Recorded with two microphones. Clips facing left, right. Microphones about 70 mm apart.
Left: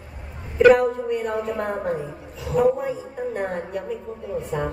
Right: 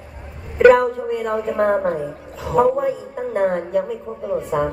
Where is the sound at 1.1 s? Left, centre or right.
Right.